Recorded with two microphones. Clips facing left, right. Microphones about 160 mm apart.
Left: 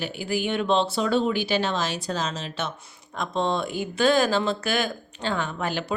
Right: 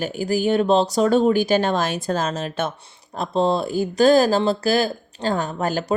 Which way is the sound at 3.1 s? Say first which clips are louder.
Right 5 dB; 35° right (ahead or behind).